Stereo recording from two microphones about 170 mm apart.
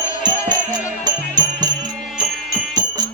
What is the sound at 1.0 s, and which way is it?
Music, 25° right (ahead or behind).